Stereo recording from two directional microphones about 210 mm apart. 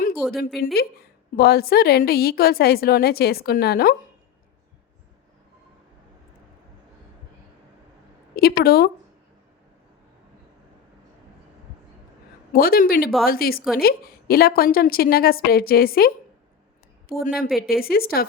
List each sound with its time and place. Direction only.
0.2 s a woman's voice: centre (ahead or behind)
0.6 s a woman's voice: 45° left (ahead or behind)
8.4 s a woman's voice: 45° left (ahead or behind)
12.5 s a woman's voice: 45° left (ahead or behind)